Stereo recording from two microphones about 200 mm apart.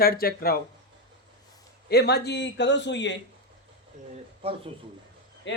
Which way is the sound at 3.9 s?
40° right (ahead or behind).